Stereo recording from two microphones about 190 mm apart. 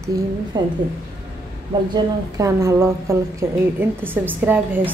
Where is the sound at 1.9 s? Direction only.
15° right (ahead or behind).